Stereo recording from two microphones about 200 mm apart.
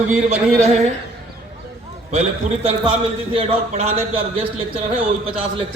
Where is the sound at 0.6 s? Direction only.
35° right (ahead or behind).